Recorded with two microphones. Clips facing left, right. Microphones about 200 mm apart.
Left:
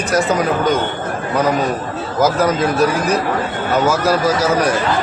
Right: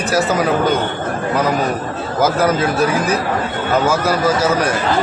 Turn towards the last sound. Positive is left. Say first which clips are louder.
# left 1 dB
turn(degrees=-5)  # may be behind; listen again after turning